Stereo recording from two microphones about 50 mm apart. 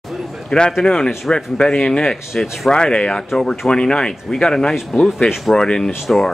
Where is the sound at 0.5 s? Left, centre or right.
Centre.